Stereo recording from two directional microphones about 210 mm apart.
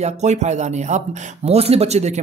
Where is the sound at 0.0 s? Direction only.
30° right (ahead or behind).